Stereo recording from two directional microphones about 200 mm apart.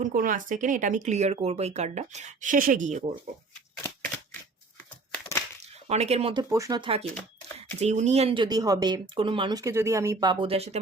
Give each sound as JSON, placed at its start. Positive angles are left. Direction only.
{"t": 0.0, "sound": "speech", "side_deg": -40}
{"t": 5.9, "sound": "speech", "side_deg": -30}
{"t": 6.5, "sound": "speech", "side_deg": -15}
{"t": 7.1, "sound": "shuffling cards", "side_deg": 10}
{"t": 7.8, "sound": "speech", "side_deg": -35}